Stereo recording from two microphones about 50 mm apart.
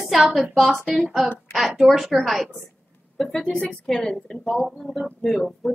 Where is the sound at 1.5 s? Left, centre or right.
Centre.